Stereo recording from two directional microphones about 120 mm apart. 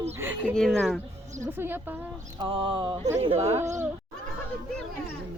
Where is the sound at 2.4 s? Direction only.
45° right (ahead or behind).